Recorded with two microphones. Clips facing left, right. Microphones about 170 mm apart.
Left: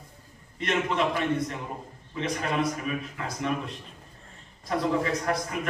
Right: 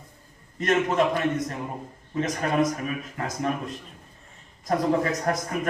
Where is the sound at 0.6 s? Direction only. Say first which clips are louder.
Right 5 dB; 45° right (ahead or behind).